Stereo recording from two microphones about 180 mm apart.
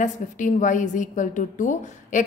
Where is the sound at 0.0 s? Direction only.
45° left (ahead or behind).